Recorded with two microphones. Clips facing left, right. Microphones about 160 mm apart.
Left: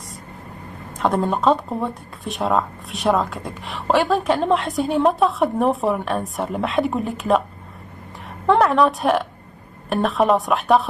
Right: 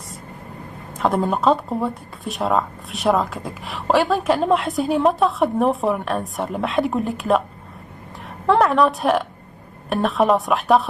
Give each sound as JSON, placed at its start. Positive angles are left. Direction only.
{"t": 0.9, "sound": "speech", "side_deg": 0}
{"t": 8.5, "sound": "speech", "side_deg": 0}